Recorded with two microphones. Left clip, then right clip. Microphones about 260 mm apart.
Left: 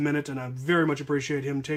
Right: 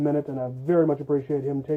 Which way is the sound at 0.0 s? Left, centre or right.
Centre.